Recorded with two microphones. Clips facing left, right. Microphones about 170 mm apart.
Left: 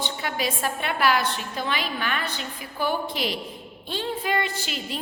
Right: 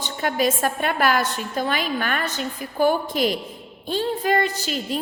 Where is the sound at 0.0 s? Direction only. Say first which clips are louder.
Right 6 dB; 45° right (ahead or behind).